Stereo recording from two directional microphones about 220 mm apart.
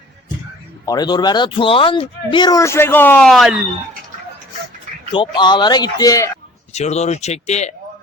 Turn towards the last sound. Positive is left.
turn(degrees=30)  # may be behind; listen again after turning